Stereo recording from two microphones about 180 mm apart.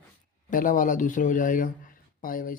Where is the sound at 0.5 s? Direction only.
50° left (ahead or behind).